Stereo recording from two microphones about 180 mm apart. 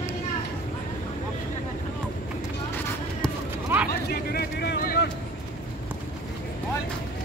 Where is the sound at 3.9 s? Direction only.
60° left (ahead or behind).